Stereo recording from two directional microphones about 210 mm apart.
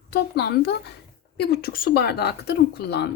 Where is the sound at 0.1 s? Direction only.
50° left (ahead or behind).